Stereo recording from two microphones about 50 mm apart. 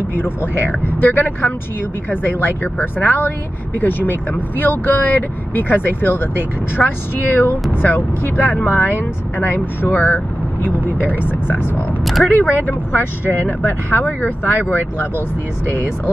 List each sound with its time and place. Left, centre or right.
0.1 s speech: left
12.0 s speech: centre
12.3 s speech: left